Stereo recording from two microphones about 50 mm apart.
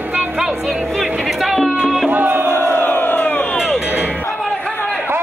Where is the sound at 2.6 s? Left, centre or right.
Left.